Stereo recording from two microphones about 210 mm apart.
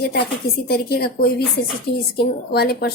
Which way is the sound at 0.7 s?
45° left (ahead or behind).